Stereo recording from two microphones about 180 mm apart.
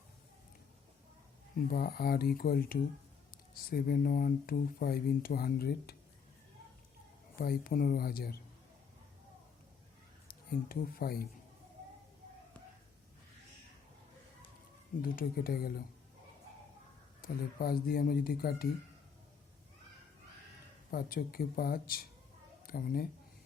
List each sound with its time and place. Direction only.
1.5 s speech: 55° left (ahead or behind)
7.3 s speech: 55° left (ahead or behind)
10.7 s speech: 55° left (ahead or behind)
15.0 s speech: 55° left (ahead or behind)
17.2 s speech: 55° left (ahead or behind)
20.9 s a woman's voice: 55° left (ahead or behind)